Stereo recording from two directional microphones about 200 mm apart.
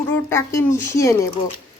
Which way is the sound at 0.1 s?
15° left (ahead or behind).